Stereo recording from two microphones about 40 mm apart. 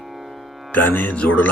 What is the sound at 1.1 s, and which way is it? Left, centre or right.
Speech, left.